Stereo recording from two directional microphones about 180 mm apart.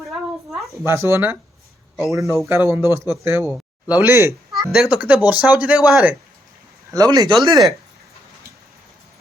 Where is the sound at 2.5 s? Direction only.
15° right (ahead or behind).